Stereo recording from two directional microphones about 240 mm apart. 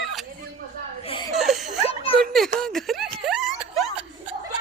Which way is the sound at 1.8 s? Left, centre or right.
Left.